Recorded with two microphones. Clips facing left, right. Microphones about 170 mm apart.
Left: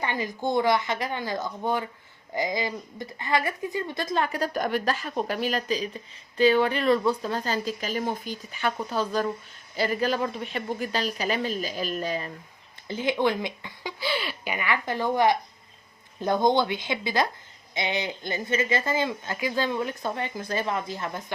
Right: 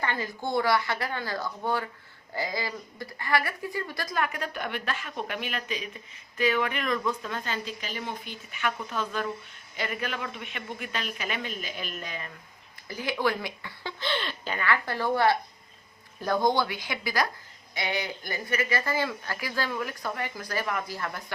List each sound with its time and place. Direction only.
0.0 s speech: 15° left (ahead or behind); by 12.3 s 35° left (ahead or behind)
12.9 s speech: 20° left (ahead or behind)